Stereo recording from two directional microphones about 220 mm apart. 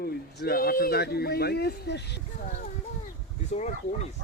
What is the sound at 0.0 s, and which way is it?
Speech, 45° left (ahead or behind).